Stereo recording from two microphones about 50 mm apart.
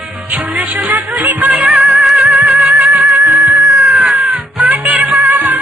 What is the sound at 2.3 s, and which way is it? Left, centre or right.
Music, right.